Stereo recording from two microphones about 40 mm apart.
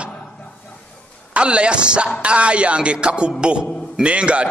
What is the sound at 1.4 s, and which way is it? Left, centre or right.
A man's voice, right.